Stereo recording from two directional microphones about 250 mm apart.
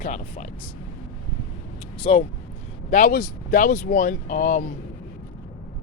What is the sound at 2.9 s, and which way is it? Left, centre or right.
Speech, left.